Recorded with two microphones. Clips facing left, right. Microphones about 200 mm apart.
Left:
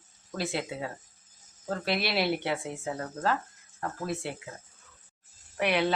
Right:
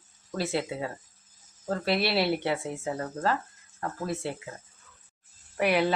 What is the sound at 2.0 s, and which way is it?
Speech, 30° right (ahead or behind).